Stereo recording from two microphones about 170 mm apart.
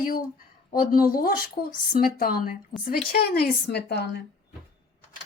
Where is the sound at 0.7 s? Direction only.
55° left (ahead or behind); by 4.2 s 70° left (ahead or behind).